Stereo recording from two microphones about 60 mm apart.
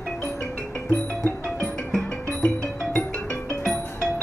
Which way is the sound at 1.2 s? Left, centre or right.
Centre.